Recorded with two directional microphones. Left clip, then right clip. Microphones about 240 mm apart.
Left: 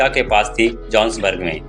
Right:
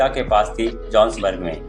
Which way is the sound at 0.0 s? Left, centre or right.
Left.